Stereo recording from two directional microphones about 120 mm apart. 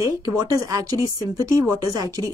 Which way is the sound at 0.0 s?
30° right (ahead or behind).